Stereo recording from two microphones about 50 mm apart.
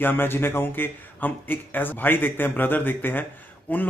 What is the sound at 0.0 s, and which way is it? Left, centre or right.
A man's voice, left.